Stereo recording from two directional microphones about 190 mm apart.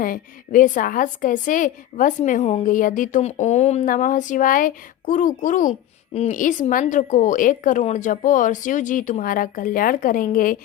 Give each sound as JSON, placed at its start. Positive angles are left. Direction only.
{"t": 0.0, "sound": "a woman's voice", "side_deg": 45}